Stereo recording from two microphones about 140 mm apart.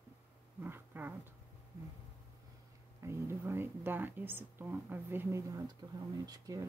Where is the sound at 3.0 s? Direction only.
20° right (ahead or behind).